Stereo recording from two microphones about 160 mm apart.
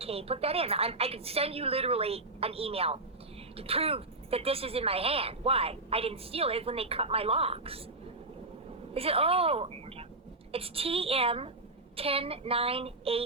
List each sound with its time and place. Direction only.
0.0 s speech: 40° right (ahead or behind)
8.9 s a woman's voice: 35° right (ahead or behind)